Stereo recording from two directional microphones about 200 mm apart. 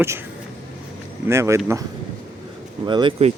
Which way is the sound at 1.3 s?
15° right (ahead or behind).